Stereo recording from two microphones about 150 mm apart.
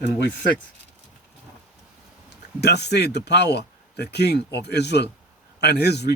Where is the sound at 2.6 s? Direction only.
90° left.